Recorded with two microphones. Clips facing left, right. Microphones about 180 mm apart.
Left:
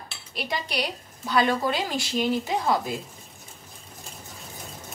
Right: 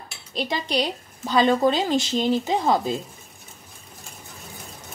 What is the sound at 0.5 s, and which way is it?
A woman's voice, 25° right (ahead or behind).